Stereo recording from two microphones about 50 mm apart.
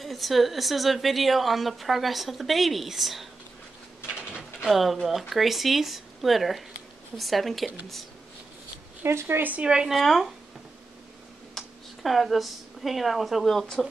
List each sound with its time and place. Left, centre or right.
0.0 s a woman's voice: centre
4.6 s a woman's voice: centre
9.0 s speech: right
9.4 s speech: right
9.7 s speech: centre
9.9 s a woman's voice: centre
11.5 s speech: centre